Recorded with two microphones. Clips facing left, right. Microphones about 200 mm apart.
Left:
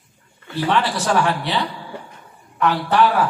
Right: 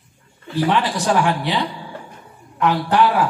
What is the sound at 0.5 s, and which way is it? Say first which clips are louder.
A man's voice: right 1 dB; 15° right (ahead or behind).